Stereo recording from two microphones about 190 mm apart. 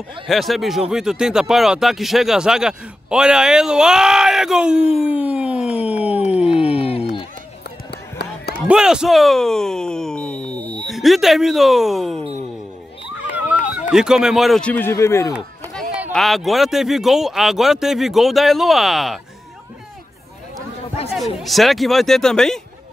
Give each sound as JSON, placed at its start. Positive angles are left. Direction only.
{"t": 0.3, "sound": "speech", "side_deg": 0}
{"t": 6.6, "sound": "a sound", "side_deg": 30}
{"t": 7.9, "sound": "a sound", "side_deg": 60}
{"t": 8.6, "sound": "speech", "side_deg": -5}
{"t": 13.9, "sound": "speech", "side_deg": -5}
{"t": 16.1, "sound": "speech", "side_deg": 0}
{"t": 21.1, "sound": "speech", "side_deg": 0}